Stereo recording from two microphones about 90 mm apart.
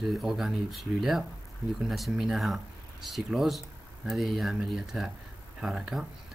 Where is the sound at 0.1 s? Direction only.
Centre (ahead or behind).